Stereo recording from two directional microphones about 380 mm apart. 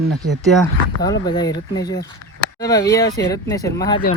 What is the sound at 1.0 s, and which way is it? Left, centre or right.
Speech, centre.